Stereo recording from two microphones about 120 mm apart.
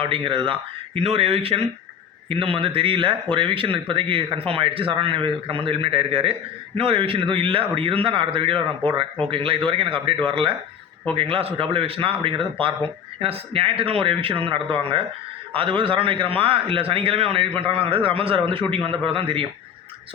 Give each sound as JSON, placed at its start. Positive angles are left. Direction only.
{"t": 0.0, "sound": "a man's voice", "side_deg": -45}
{"t": 0.9, "sound": "a man's voice", "side_deg": -55}